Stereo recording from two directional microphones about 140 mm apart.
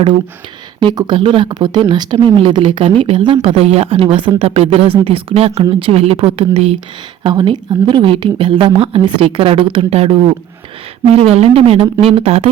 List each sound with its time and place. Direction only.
0.9 s speech: 35° right (ahead or behind)
7.3 s speech: 35° right (ahead or behind)